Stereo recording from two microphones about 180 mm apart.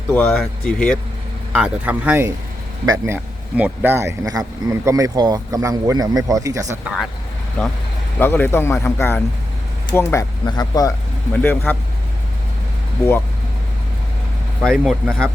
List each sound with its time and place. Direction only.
0.1 s speech: 10° left (ahead or behind)
1.5 s speech: 5° right (ahead or behind)
2.8 s speech: 20° right (ahead or behind)
6.8 s speech: centre (ahead or behind); by 10.9 s 20° left (ahead or behind)
11.3 s speech: 10° left (ahead or behind)
14.6 s speech: centre (ahead or behind)